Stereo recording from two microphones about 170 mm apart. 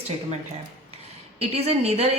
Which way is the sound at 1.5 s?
40° right (ahead or behind).